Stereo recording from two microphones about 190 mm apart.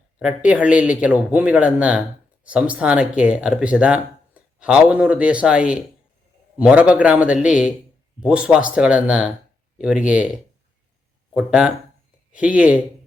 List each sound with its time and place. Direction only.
0.2 s a man's voice: 5° right (ahead or behind)